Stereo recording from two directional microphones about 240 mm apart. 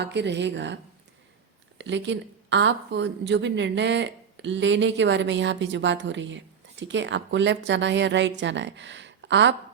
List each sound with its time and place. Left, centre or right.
0.0 s speech: right
1.8 s speech: right